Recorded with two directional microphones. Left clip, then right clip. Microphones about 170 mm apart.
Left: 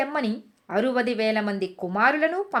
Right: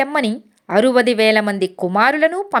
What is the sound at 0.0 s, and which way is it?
Speech, 35° right (ahead or behind).